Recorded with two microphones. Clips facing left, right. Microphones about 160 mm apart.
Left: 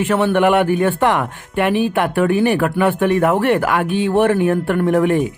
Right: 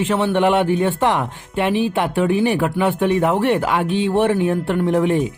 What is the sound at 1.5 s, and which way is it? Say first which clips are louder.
Speech: left 2 dB; 55° left (ahead or behind).